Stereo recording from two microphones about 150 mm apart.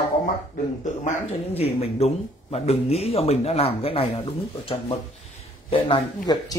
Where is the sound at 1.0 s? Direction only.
50° left (ahead or behind).